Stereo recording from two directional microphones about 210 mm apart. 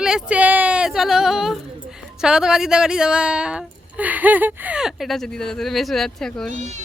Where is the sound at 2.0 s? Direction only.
5° right (ahead or behind).